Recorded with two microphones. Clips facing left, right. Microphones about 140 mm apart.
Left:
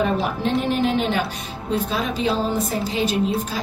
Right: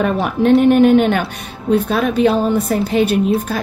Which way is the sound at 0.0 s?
60° right (ahead or behind).